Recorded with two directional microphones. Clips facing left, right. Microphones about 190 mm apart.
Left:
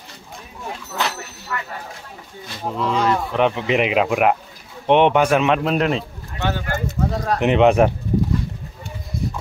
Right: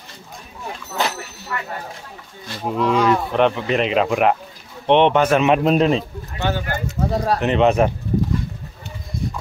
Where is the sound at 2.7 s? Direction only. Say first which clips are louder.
Right 3 dB; 10° right (ahead or behind).